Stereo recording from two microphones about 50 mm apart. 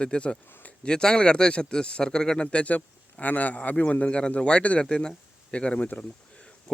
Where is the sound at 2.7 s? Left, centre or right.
Left.